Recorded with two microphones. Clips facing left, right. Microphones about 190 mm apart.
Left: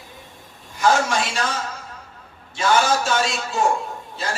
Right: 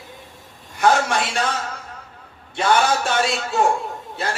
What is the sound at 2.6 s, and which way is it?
A man's voice, 60° right (ahead or behind).